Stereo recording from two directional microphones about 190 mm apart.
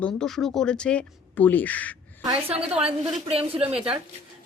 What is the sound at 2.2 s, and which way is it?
A woman's voice, 30° right (ahead or behind).